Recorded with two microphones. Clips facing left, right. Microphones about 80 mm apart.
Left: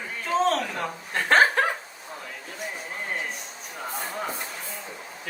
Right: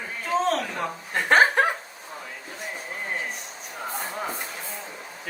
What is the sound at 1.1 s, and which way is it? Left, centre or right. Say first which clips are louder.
Chuckle: right 1 dB; centre.